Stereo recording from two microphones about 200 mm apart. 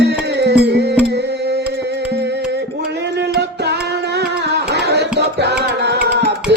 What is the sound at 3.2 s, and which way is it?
Music, 55° right (ahead or behind).